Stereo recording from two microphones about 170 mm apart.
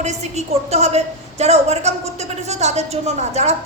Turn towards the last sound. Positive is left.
turn(degrees=-40)  # may be behind; listen again after turning